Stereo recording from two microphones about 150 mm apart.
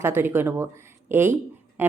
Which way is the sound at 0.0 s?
15° right (ahead or behind).